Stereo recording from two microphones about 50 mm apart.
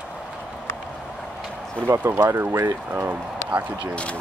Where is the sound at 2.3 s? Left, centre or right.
Right.